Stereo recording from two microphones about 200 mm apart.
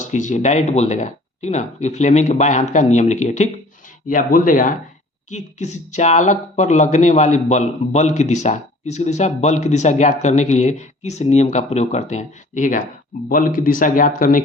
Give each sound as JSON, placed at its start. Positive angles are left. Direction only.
{"t": 0.0, "sound": "speech", "side_deg": 40}